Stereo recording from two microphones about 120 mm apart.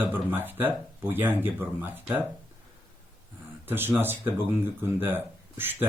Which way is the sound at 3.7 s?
20° right (ahead or behind).